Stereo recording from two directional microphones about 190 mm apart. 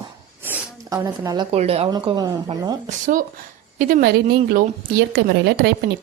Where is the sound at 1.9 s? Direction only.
20° right (ahead or behind).